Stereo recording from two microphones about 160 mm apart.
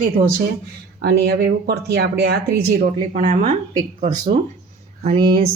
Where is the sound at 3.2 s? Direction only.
50° right (ahead or behind).